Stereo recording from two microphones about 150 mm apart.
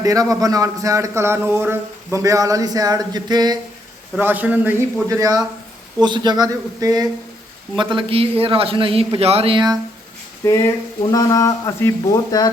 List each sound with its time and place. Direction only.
0.0 s speech: 25° right (ahead or behind)
4.2 s a man's voice: 10° right (ahead or behind)
5.0 s a man's voice: 25° right (ahead or behind)
10.4 s speech: 20° left (ahead or behind)